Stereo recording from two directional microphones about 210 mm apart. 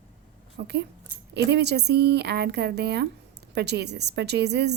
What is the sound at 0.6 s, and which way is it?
A woman's voice, 50° right (ahead or behind).